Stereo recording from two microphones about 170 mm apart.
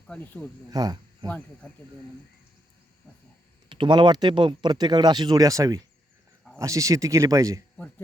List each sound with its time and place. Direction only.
0.1 s speech: 10° left (ahead or behind)
0.7 s speech: 25° right (ahead or behind)
1.3 s speech: 5° left (ahead or behind)
3.7 s speech: 30° right (ahead or behind)